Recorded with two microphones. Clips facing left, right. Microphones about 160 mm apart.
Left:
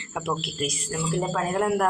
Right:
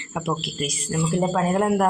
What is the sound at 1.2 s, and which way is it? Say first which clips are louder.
Speech: right 4 dB; 30° right (ahead or behind).